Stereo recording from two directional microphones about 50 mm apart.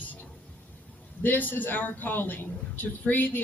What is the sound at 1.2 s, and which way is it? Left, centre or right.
A man's voice, left.